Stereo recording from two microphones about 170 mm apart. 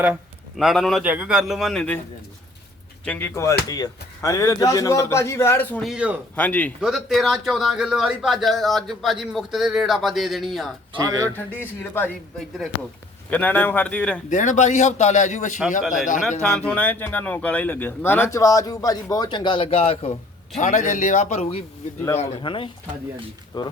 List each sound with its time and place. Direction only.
0.5 s a man's voice: centre (ahead or behind)
3.0 s speech: 10° left (ahead or behind)
5.8 s a man's voice: 5° right (ahead or behind)
6.3 s a man's voice: 10° left (ahead or behind)
10.9 s speech: 20° right (ahead or behind)
11.3 s speech: 10° left (ahead or behind)
13.3 s speech: 10° left (ahead or behind)
14.3 s speech: 45° left (ahead or behind)
16.4 s speech: 5° left (ahead or behind); by 20.1 s 35° left (ahead or behind)
20.6 s speech: 50° left (ahead or behind); by 23.7 s 25° left (ahead or behind)